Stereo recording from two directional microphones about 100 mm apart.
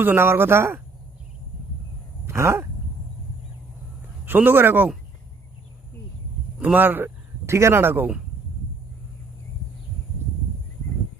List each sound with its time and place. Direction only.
0.0 s speech: 20° right (ahead or behind)
2.2 s dog: 25° right (ahead or behind)
4.3 s speech: 20° right (ahead or behind)
6.6 s speech: 15° right (ahead or behind)